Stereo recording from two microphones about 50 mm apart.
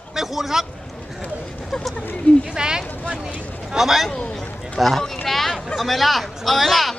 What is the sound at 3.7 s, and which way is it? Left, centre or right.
Speech, centre.